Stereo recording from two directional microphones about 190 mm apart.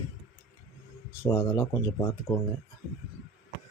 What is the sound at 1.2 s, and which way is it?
Speech, 10° left (ahead or behind).